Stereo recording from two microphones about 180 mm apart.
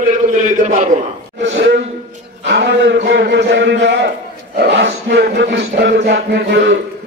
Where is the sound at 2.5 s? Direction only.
80° right.